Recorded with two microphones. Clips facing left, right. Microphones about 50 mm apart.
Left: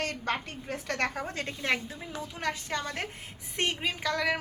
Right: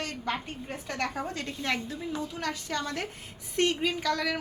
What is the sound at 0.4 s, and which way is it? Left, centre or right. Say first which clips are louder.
Speech: left 2 dB; left.